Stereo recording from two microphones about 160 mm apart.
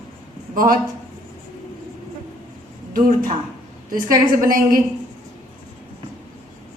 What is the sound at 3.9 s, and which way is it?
Speech, 60° right (ahead or behind).